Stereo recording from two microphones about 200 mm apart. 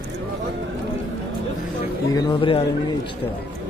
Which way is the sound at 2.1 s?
25° left (ahead or behind).